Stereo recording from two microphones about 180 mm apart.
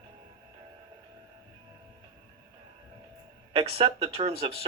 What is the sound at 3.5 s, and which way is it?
Speech, 30° right (ahead or behind).